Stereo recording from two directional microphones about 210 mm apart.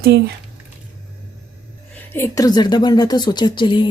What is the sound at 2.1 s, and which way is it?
Speech, 15° left (ahead or behind).